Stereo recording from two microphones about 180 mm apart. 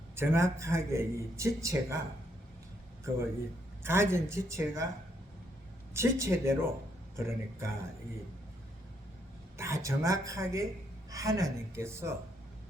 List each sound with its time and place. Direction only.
0.2 s a man's voice: 15° right (ahead or behind)
3.8 s a man's voice: 15° right (ahead or behind)
5.9 s a man's voice: 15° right (ahead or behind)
9.6 s a man's voice: 15° right (ahead or behind)